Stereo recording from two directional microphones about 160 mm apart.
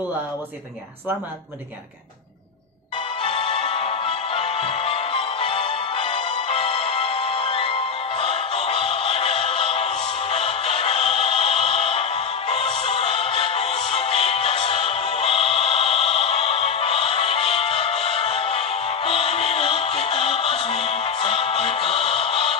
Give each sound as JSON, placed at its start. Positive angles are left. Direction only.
{"t": 3.3, "sound": "music", "side_deg": 35}